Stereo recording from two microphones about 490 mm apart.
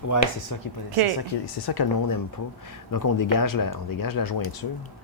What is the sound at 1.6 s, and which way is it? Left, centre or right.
Speech, left.